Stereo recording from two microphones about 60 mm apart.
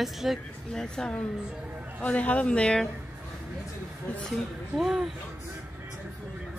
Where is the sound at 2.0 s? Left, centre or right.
Left.